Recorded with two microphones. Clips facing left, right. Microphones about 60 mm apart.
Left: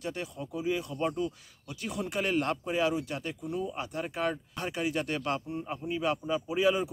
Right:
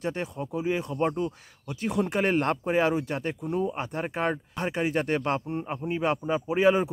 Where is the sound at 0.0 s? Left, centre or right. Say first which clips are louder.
Right 5 dB; right.